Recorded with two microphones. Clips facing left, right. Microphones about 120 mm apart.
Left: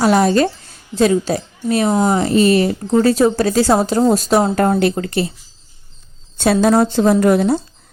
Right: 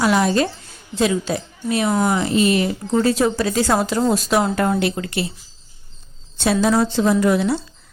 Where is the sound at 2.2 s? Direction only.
40° left (ahead or behind).